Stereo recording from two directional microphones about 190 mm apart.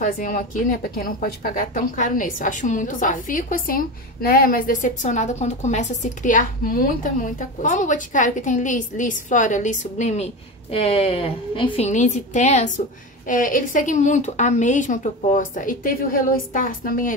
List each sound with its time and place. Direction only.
0.0 s a woman's voice: 45° left (ahead or behind)